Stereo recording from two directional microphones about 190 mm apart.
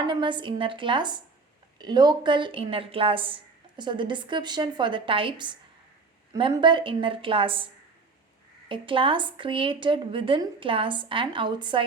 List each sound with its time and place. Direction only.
0.1 s a woman's voice: 25° right (ahead or behind)
8.7 s a woman's voice: 25° right (ahead or behind)